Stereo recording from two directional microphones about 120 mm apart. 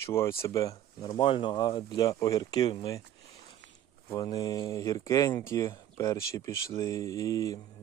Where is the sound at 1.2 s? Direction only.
45° left (ahead or behind); by 3.0 s 30° left (ahead or behind).